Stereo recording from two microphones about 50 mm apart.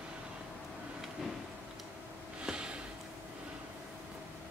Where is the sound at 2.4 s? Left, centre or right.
Centre.